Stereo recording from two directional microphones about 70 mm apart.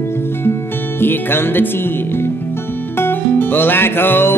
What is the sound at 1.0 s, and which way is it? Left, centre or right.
Music, left.